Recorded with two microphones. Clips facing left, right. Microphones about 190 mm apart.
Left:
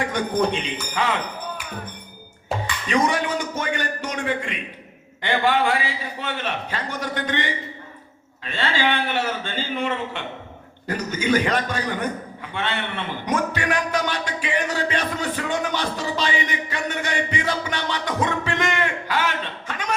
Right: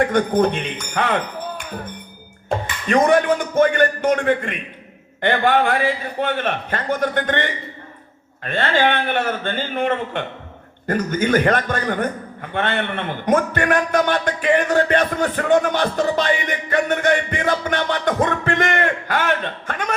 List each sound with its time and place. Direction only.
0.0 s a man's voice: 55° right (ahead or behind)
0.9 s a sound: 55° right (ahead or behind)
2.5 s a man's voice: 55° right (ahead or behind)